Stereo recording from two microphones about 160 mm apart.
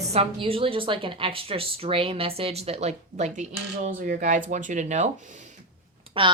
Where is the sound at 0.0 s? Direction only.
40° right (ahead or behind).